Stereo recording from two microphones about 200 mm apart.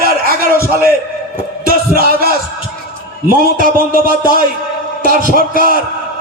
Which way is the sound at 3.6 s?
45° right (ahead or behind).